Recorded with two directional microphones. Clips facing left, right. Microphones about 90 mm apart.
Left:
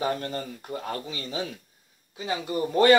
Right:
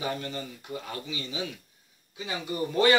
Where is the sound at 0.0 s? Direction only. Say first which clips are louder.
Left 4 dB; 40° left (ahead or behind).